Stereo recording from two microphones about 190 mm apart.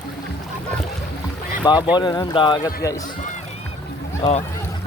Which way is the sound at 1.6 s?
20° left (ahead or behind).